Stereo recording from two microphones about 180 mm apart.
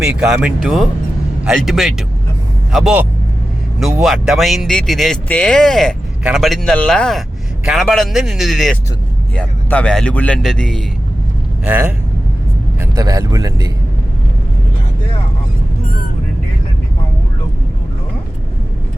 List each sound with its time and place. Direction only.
0.0 s speech: 5° right (ahead or behind)
11.6 s speech: 10° right (ahead or behind)
12.8 s speech: 20° right (ahead or behind)